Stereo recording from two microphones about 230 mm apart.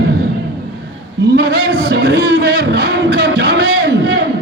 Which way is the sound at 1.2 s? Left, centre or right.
Right.